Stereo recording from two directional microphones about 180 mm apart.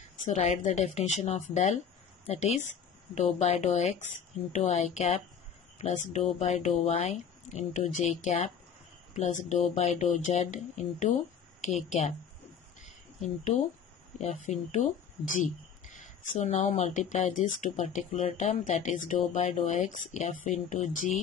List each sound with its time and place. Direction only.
0.3 s speech: 40° left (ahead or behind)
12.8 s a sound: 40° left (ahead or behind)
14.1 s speech: 40° left (ahead or behind)